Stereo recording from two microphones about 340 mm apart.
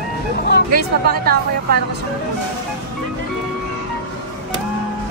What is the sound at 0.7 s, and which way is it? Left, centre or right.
Speech, right.